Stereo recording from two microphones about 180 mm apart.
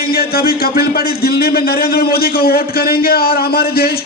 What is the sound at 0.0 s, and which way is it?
A man's voice, 55° left (ahead or behind).